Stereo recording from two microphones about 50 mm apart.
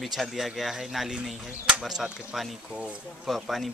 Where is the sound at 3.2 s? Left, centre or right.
Centre.